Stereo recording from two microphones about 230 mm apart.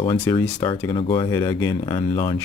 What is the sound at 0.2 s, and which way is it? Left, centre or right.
Speech, centre.